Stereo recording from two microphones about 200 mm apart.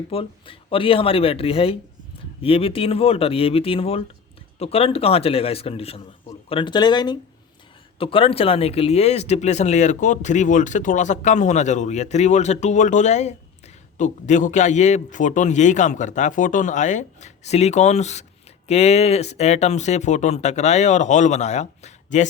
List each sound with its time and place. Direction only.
0.1 s a man's voice: 25° left (ahead or behind)